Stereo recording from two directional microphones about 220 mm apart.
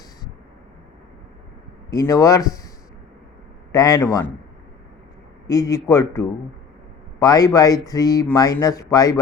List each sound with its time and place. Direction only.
2.0 s a man's voice: 15° left (ahead or behind)
3.7 s a man's voice: 15° left (ahead or behind)
5.5 s a man's voice: 15° left (ahead or behind)